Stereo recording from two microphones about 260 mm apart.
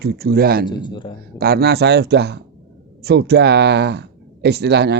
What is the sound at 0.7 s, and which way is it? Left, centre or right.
Speech, centre.